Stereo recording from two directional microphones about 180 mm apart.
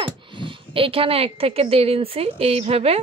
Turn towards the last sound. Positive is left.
turn(degrees=-35)  # may be behind; listen again after turning